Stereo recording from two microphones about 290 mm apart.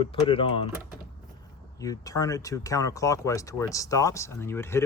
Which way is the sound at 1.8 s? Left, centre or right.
Centre.